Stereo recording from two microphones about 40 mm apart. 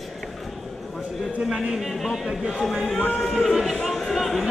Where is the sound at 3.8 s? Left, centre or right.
Centre.